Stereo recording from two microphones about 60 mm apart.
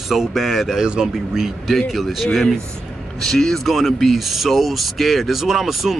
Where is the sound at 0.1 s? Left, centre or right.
Centre.